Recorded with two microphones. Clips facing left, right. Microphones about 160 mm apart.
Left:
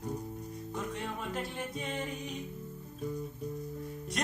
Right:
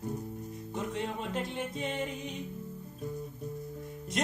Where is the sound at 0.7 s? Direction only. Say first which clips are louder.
Right 3 dB; 25° right (ahead or behind).